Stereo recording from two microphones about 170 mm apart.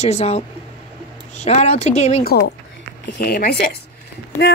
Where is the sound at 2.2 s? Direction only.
70° left (ahead or behind).